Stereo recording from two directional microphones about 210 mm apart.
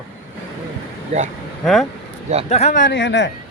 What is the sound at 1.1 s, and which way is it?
Speech, 30° right (ahead or behind).